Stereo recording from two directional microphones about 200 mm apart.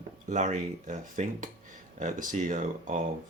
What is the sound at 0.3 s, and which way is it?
Speech, 35° right (ahead or behind).